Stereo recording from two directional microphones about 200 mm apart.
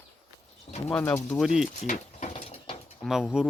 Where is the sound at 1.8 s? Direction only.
40° left (ahead or behind).